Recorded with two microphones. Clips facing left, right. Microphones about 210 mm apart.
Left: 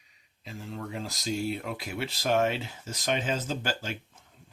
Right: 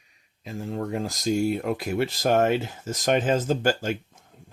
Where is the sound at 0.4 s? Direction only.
45° right (ahead or behind).